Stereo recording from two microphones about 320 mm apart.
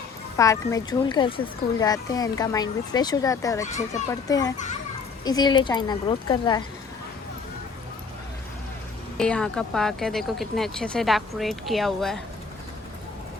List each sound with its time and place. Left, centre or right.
0.3 s speech: centre
3.7 s speech: left
4.1 s speech: centre
9.1 s speech: centre